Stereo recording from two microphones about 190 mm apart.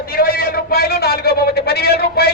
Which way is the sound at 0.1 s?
50° left (ahead or behind).